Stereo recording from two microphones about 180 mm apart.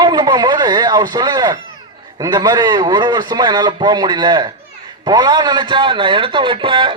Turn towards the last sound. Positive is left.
turn(degrees=-25)  # may be behind; listen again after turning